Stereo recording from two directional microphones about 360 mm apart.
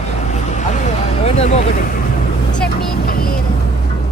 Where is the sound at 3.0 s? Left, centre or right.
Left.